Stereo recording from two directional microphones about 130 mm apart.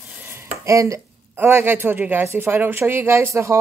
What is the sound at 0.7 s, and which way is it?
Speech, 25° right (ahead or behind).